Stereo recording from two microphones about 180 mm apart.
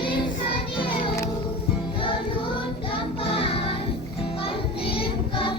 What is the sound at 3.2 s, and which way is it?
Music, 30° left (ahead or behind).